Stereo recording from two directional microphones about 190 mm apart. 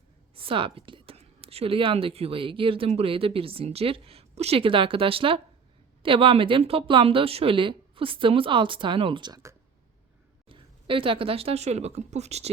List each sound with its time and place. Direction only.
0.3 s speech: 30° right (ahead or behind)